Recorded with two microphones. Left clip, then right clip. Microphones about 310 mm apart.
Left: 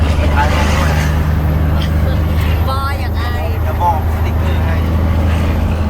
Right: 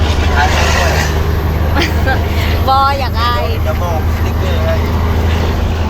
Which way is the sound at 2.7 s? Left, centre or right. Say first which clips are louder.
Right 12 dB; centre.